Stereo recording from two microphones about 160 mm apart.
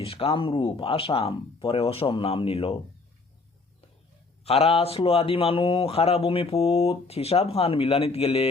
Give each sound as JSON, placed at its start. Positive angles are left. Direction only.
{"t": 0.0, "sound": "speech", "side_deg": 35}
{"t": 4.4, "sound": "speech", "side_deg": 40}